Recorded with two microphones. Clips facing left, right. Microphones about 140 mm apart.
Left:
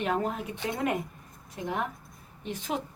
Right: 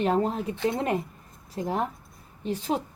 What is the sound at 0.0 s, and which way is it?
Speech, 30° right (ahead or behind).